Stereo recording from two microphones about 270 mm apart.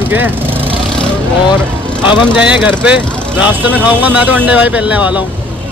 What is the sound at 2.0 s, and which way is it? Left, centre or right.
Speech, centre.